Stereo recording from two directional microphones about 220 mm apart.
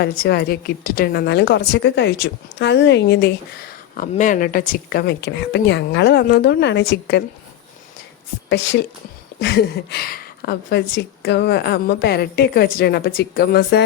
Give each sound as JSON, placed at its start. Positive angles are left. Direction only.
{"t": 0.0, "sound": "speech", "side_deg": 45}
{"t": 8.4, "sound": "speech", "side_deg": 55}